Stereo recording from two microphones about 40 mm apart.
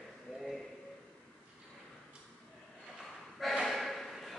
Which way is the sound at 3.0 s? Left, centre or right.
Centre.